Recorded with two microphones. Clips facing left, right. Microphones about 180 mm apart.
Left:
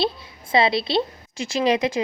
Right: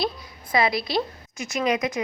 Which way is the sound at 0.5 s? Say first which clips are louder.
Left 3 dB; 25° left (ahead or behind).